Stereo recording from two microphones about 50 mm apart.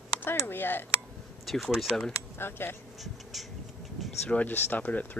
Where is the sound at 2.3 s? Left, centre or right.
Left.